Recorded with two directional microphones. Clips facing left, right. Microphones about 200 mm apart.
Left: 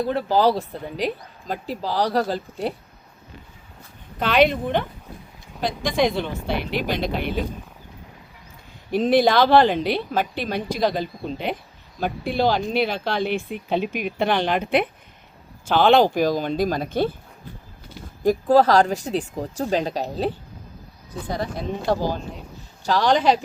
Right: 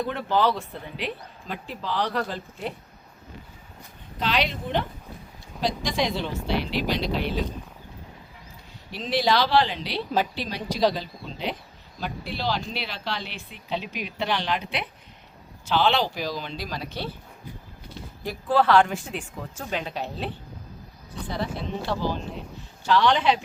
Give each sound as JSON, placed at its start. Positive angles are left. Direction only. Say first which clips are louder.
{"t": 0.0, "sound": "a woman's voice", "louder": "left 5 dB", "side_deg": 35}
{"t": 4.2, "sound": "speech", "louder": "left 8 dB", "side_deg": 55}
{"t": 8.9, "sound": "speech", "louder": "left 7 dB", "side_deg": 50}
{"t": 18.3, "sound": "a woman's voice", "louder": "left 5 dB", "side_deg": 40}